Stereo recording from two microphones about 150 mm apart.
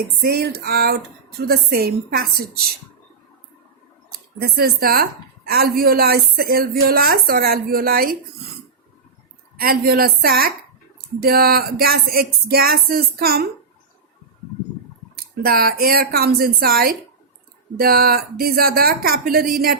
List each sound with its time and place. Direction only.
0.2 s a woman's voice: 90° right
4.4 s a woman's voice: 90° right
9.6 s a woman's voice: 90° right
15.1 s a woman's voice: 90° right